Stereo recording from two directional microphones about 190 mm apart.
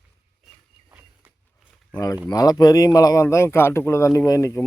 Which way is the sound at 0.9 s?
10° right (ahead or behind).